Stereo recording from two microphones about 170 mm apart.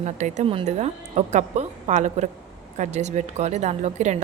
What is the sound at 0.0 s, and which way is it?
Speech, 45° right (ahead or behind).